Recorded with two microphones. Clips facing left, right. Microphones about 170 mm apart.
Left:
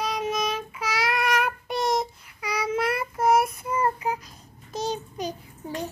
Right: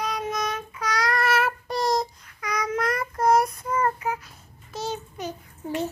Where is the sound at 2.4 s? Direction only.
10° left (ahead or behind).